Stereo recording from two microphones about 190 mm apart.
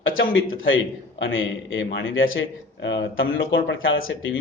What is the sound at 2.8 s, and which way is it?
Speech, 75° left (ahead or behind).